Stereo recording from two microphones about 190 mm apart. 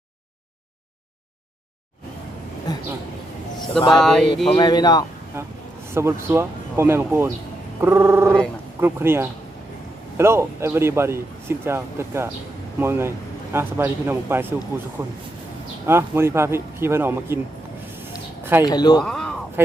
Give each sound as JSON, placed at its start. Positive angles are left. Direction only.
{"t": 2.7, "sound": "speech", "side_deg": 20}
{"t": 3.9, "sound": "a sound", "side_deg": 0}
{"t": 4.5, "sound": "speech", "side_deg": 20}
{"t": 5.3, "sound": "speech", "side_deg": -15}
{"t": 15.9, "sound": "speech", "side_deg": -15}
{"t": 18.6, "sound": "speech", "side_deg": 20}
{"t": 19.0, "sound": "a sound", "side_deg": 5}
{"t": 19.6, "sound": "speech", "side_deg": -10}